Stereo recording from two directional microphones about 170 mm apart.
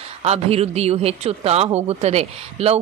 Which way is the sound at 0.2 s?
35° right (ahead or behind).